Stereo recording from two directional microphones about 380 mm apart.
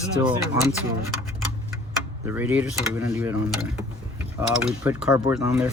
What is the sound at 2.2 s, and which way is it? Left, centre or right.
Cutlery, centre.